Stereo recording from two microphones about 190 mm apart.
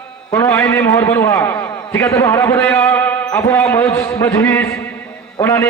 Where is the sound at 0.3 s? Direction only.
15° left (ahead or behind).